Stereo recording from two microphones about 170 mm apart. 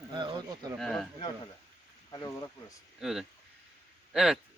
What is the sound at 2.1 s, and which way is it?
Speech, 20° left (ahead or behind).